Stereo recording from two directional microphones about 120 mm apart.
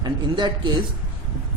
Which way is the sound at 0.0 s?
35° right (ahead or behind).